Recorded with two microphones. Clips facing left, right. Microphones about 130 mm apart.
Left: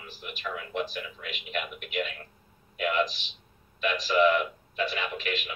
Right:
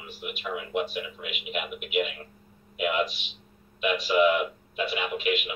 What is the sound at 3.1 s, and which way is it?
Speech, 35° left (ahead or behind).